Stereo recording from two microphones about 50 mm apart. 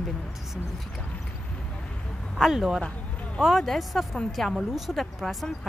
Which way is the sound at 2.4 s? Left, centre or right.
Centre.